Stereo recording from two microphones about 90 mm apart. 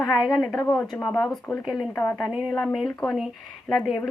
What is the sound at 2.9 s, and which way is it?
Speech, 15° left (ahead or behind).